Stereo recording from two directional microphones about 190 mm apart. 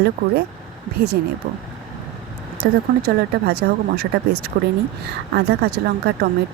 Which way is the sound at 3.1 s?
60° right (ahead or behind).